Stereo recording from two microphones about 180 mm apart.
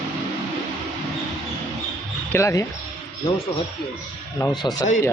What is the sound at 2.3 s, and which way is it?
Speech, 15° left (ahead or behind).